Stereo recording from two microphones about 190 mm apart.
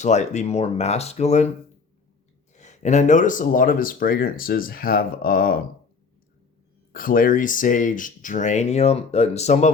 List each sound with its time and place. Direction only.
0.0 s speech: 40° left (ahead or behind)
2.6 s speech: 40° left (ahead or behind)
6.9 s speech: 50° left (ahead or behind)